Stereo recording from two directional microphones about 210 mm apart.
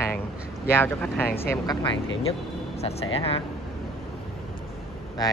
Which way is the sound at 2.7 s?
30° left (ahead or behind).